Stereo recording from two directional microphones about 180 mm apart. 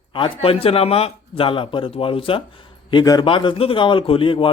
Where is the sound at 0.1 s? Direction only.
30° left (ahead or behind).